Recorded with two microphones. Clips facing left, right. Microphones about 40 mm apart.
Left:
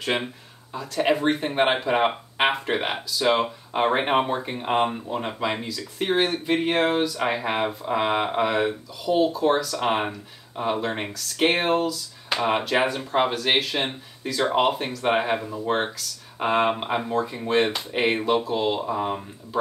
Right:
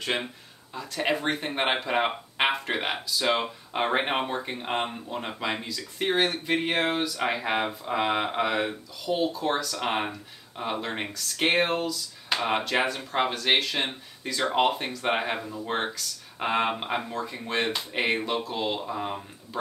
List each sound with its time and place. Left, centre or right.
0.7 s speech: centre